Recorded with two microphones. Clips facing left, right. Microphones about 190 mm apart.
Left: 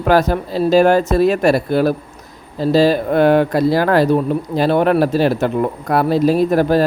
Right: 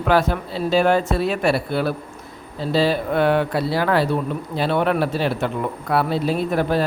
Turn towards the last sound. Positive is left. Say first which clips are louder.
# left 6 dB
turn(degrees=40)  # may be behind; listen again after turning